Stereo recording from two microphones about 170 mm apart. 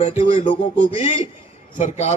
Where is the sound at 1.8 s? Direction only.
45° left (ahead or behind).